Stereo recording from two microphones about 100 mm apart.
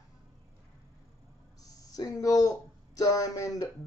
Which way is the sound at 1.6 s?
40° left (ahead or behind).